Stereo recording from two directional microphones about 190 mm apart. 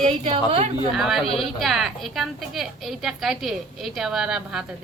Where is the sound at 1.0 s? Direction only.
Centre (ahead or behind).